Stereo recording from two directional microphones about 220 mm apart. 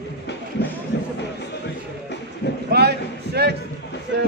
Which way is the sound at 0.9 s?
45° left (ahead or behind).